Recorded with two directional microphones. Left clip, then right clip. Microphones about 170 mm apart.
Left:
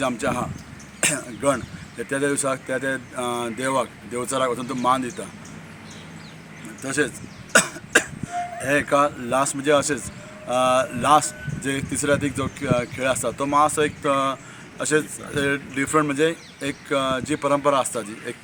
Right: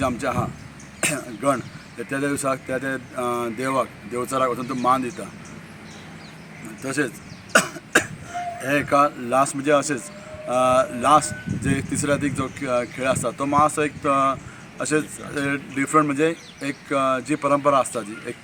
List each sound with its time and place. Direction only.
0.0 s speech: 10° left (ahead or behind)
6.8 s speech: 10° left (ahead or behind)